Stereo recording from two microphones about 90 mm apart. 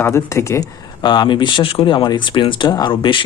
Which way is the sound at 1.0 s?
60° left (ahead or behind).